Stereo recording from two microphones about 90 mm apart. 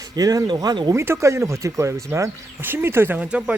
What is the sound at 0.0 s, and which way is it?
Speech, 45° right (ahead or behind).